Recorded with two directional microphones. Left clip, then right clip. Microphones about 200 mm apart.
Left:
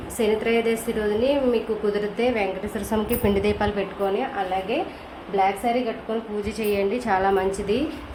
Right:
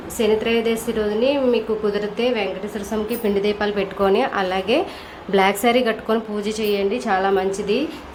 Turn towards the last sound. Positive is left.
turn(degrees=-15)  # may be behind; listen again after turning